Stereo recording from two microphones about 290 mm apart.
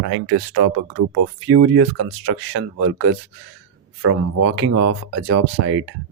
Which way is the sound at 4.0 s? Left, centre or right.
Right.